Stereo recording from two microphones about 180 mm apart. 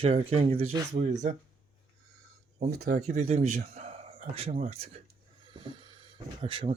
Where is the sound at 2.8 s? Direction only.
40° right (ahead or behind).